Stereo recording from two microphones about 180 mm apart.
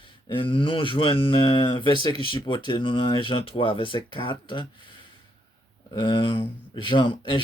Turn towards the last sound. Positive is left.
turn(degrees=25)  # may be behind; listen again after turning